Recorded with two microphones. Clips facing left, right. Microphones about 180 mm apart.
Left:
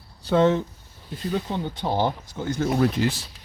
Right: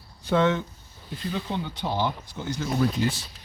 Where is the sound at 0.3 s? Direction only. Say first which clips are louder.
Left 3 dB; 35° left (ahead or behind).